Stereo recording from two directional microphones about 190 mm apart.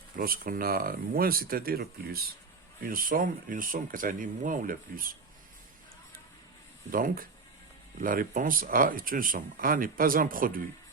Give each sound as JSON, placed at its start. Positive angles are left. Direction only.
{"t": 0.2, "sound": "speech", "side_deg": -50}
{"t": 6.9, "sound": "speech", "side_deg": -45}